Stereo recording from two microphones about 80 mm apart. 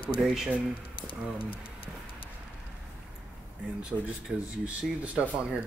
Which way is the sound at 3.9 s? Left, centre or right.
Centre.